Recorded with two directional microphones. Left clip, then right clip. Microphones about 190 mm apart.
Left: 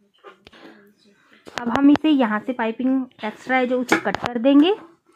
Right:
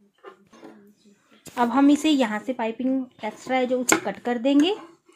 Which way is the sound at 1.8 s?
25° left (ahead or behind).